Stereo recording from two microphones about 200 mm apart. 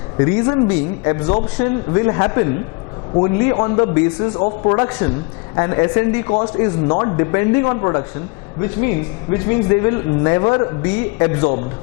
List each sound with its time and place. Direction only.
0.2 s speech: 20° left (ahead or behind)
9.5 s speech: 20° left (ahead or behind)